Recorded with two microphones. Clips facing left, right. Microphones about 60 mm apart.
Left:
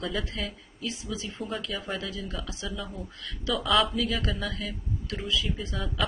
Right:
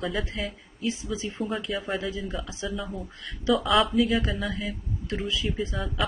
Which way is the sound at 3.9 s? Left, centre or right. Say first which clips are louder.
Right 5 dB; centre.